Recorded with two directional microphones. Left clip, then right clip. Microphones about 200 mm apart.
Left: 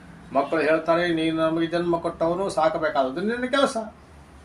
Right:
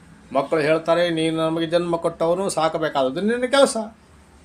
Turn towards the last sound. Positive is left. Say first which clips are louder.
# right 5 dB
turn(degrees=-55)  # may be behind; listen again after turning